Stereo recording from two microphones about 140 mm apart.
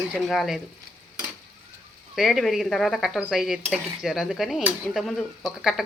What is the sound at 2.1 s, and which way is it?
Speech, centre (ahead or behind).